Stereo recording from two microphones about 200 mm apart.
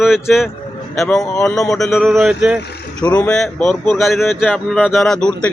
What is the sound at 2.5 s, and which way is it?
Speech, 55° left (ahead or behind).